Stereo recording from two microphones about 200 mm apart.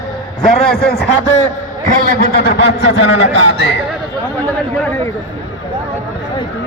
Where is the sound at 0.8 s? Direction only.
55° left (ahead or behind).